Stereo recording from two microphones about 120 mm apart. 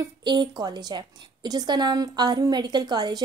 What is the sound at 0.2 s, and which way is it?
A woman's voice, 40° right (ahead or behind).